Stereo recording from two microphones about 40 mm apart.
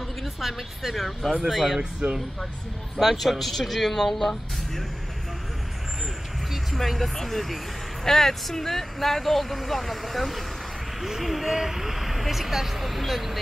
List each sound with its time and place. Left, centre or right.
0.2 s a woman's voice: centre
1.8 s speech: right
3.0 s speech: centre
6.5 s speech: centre